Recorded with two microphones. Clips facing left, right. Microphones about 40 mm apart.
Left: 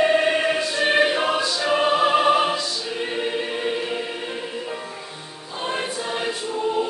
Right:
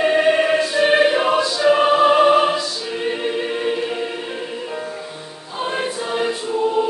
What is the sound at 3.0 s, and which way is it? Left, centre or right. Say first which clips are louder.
Choir: right 4 dB; centre.